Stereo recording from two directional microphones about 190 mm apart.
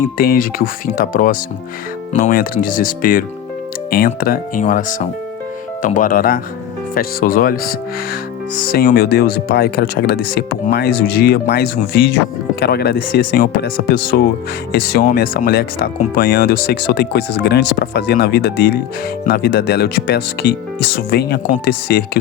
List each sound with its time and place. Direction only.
0.2 s speech: 50° left (ahead or behind)